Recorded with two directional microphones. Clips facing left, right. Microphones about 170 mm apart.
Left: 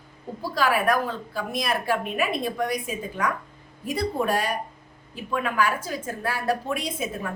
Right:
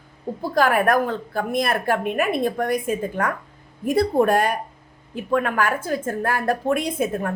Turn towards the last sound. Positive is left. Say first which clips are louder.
# right 7 dB
turn(degrees=-55)  # may be behind; listen again after turning